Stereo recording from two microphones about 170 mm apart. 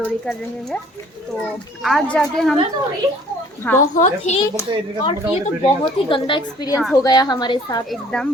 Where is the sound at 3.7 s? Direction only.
10° left (ahead or behind).